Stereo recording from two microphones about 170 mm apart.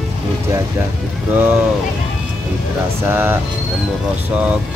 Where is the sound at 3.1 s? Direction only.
10° right (ahead or behind).